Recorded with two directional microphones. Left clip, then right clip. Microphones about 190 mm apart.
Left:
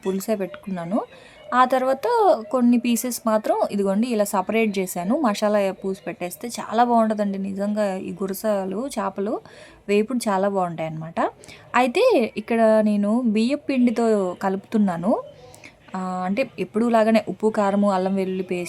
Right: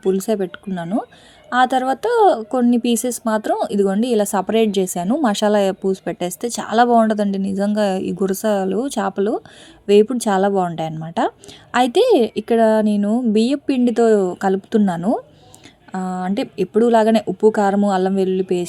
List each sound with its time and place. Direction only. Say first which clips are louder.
0.0 s a woman's voice: right 6 dB; 15° right (ahead or behind)